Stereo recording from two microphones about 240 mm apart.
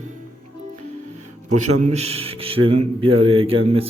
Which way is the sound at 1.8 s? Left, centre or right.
Right.